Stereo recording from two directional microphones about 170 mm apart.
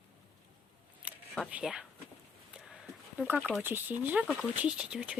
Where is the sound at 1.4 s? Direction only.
5° right (ahead or behind).